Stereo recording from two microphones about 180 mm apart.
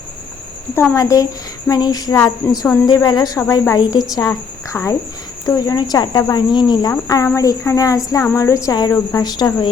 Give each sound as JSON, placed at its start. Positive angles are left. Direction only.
{"t": 0.7, "sound": "a woman's voice", "side_deg": 15}